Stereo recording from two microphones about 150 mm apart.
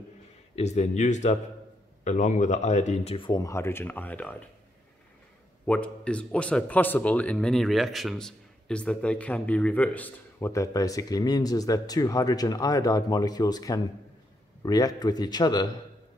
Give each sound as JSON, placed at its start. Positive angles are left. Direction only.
{"t": 0.6, "sound": "speech", "side_deg": 50}
{"t": 5.7, "sound": "a man's voice", "side_deg": 10}